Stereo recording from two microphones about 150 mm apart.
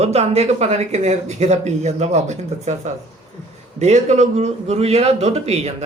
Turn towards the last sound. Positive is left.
turn(degrees=-45)  # may be behind; listen again after turning